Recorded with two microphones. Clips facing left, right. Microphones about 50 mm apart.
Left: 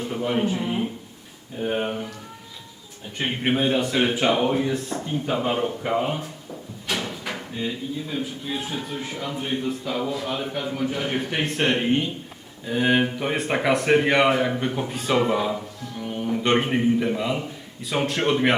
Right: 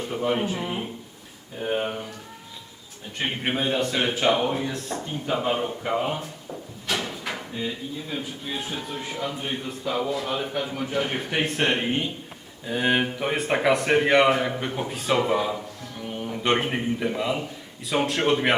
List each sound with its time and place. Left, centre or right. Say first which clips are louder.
0.1 s speech: left 1 dB; centre
3.2 s a man's voice: left 3 dB; centre